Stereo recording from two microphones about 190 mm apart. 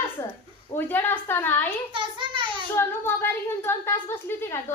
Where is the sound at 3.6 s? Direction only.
10° left (ahead or behind).